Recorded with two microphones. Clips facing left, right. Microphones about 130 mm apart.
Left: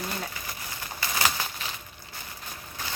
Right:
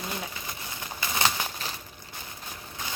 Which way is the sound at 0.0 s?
20° right (ahead or behind).